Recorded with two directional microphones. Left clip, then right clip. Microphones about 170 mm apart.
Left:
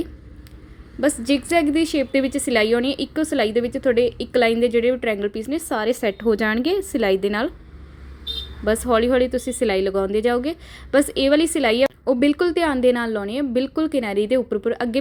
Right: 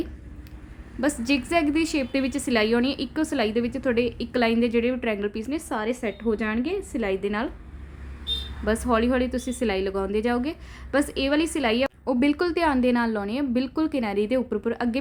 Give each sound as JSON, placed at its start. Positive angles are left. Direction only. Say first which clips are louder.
{"t": 1.0, "sound": "a woman's voice", "louder": "left 4 dB", "side_deg": 15}
{"t": 8.6, "sound": "a woman's voice", "louder": "left 5 dB", "side_deg": 20}